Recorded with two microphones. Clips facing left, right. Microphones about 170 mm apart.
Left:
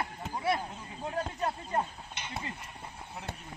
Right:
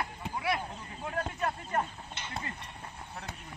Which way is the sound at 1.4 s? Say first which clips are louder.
Even; 15° left (ahead or behind).